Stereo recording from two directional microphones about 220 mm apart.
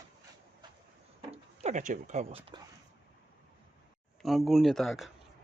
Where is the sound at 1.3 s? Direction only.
30° right (ahead or behind).